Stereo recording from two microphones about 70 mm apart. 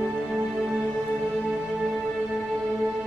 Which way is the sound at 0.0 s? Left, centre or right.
Centre.